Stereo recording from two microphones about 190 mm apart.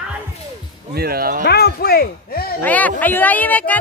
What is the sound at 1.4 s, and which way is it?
Speech, 55° left (ahead or behind).